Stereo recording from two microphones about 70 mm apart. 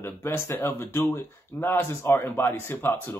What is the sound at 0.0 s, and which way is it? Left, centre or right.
Speech, left.